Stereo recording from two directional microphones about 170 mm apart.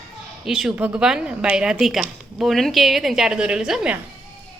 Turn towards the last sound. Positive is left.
turn(degrees=-5)  # may be behind; listen again after turning